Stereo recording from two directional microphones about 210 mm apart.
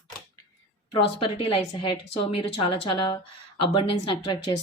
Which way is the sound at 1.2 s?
25° left (ahead or behind).